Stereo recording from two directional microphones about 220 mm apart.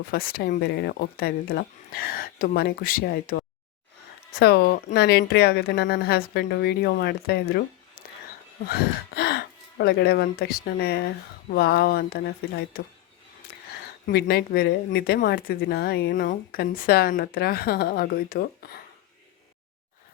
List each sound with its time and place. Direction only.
0.1 s speech: 40° left (ahead or behind)
8.6 s speech: 45° left (ahead or behind)
14.1 s speech: 45° left (ahead or behind)